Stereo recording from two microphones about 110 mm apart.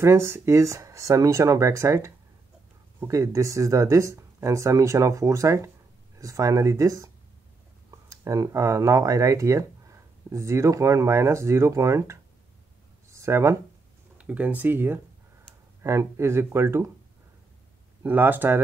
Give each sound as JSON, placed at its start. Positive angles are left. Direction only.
{"t": 0.0, "sound": "speech", "side_deg": -25}
{"t": 8.1, "sound": "speech", "side_deg": -30}
{"t": 14.1, "sound": "speech", "side_deg": -15}
{"t": 18.0, "sound": "speech", "side_deg": -15}